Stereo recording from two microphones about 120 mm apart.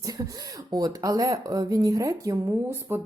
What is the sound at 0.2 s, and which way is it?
Speech, 35° right (ahead or behind).